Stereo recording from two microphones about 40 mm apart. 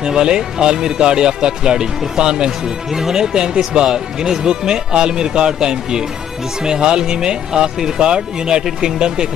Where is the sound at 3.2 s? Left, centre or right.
Centre.